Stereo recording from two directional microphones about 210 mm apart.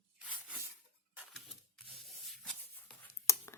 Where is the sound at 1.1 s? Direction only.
5° right (ahead or behind).